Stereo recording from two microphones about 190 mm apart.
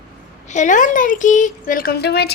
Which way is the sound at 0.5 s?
40° left (ahead or behind).